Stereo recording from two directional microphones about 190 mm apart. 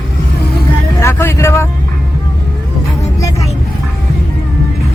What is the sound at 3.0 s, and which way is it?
Vehicle, 15° left (ahead or behind).